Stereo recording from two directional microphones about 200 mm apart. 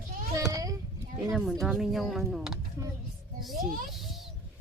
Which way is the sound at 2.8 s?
15° right (ahead or behind).